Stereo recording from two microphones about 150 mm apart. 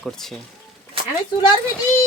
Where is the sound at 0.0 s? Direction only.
Centre (ahead or behind).